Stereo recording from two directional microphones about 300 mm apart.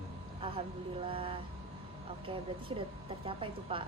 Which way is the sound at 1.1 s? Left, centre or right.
Centre.